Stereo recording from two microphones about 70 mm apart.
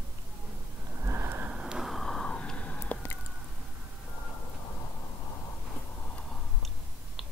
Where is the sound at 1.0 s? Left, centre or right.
Right.